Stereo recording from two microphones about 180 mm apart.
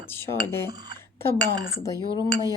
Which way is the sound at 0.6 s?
25° right (ahead or behind).